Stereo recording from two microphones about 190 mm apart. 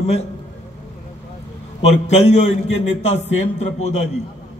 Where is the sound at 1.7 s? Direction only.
35° left (ahead or behind).